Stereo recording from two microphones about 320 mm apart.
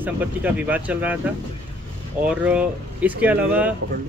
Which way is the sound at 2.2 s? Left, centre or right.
Centre.